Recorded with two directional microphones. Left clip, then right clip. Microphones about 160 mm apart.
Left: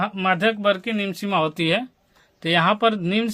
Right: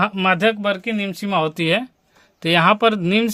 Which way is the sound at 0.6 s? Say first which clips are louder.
Even; 15° right (ahead or behind).